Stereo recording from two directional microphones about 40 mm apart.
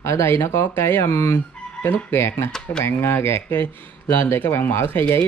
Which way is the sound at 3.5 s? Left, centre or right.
Left.